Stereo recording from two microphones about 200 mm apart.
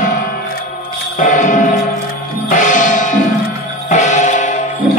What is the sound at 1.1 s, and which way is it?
Music, 40° left (ahead or behind).